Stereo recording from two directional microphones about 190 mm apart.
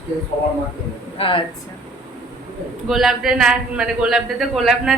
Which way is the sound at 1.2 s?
25° left (ahead or behind).